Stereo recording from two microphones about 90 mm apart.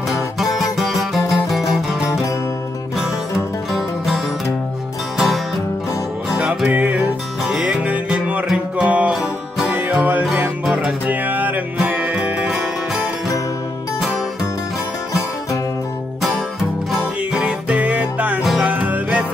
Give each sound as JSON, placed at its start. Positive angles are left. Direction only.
{"t": 0.1, "sound": "music", "side_deg": 0}
{"t": 3.0, "sound": "music", "side_deg": -5}
{"t": 17.3, "sound": "music", "side_deg": -10}
{"t": 18.4, "sound": "music", "side_deg": 0}
{"t": 18.7, "sound": "music", "side_deg": -15}